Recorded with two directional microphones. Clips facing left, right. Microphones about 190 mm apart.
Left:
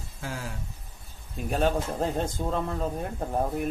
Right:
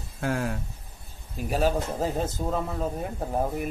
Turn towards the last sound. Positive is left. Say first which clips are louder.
# even
turn(degrees=-5)  # may be behind; listen again after turning